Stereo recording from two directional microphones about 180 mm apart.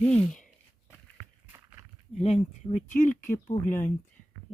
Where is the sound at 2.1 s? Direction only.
40° left (ahead or behind).